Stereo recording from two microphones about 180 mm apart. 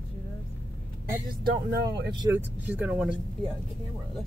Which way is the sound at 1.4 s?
60° right (ahead or behind).